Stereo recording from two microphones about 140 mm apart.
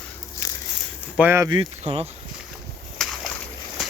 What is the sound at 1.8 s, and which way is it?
Speech, 45° right (ahead or behind).